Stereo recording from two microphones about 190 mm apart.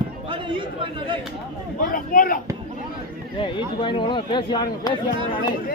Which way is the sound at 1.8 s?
50° left (ahead or behind).